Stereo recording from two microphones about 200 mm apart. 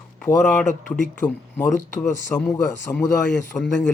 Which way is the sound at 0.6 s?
40° left (ahead or behind).